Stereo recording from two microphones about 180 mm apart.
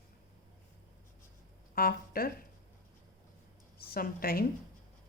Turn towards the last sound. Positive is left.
turn(degrees=55)  # may be behind; listen again after turning